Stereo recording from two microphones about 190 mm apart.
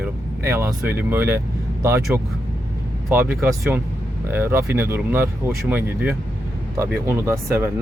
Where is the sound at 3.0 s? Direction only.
10° right (ahead or behind).